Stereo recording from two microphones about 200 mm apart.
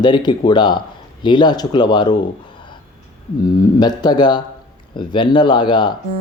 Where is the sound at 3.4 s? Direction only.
20° left (ahead or behind).